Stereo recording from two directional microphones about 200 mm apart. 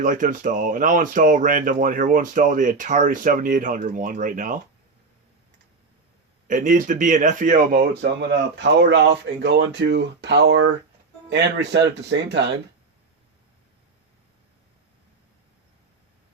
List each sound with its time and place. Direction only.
0.0 s speech: 40° right (ahead or behind)
6.5 s speech: 40° right (ahead or behind)
8.9 s speech: 60° right (ahead or behind)